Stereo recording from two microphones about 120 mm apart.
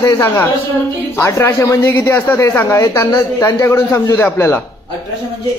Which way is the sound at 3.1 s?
35° left (ahead or behind).